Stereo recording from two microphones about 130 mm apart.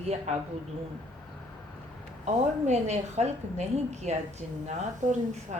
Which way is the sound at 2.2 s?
60° right (ahead or behind).